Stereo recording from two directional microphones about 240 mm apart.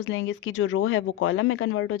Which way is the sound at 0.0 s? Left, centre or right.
Left.